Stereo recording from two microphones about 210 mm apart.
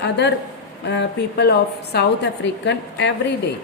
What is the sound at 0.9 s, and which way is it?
A woman's voice, 55° left (ahead or behind).